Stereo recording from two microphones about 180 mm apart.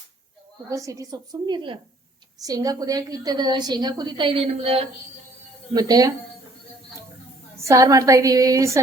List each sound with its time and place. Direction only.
0.7 s a woman's voice: 20° right (ahead or behind)
5.7 s a woman's voice: 20° right (ahead or behind)
7.6 s a woman's voice: 15° right (ahead or behind)